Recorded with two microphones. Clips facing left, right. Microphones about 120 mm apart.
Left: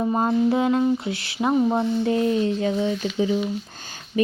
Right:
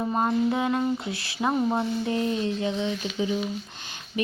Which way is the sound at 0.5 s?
25° left (ahead or behind).